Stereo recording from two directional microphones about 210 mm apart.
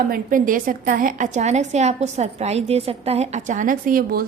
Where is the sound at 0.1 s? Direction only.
40° right (ahead or behind).